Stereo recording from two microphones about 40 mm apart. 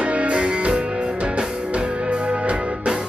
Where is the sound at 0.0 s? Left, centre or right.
Right.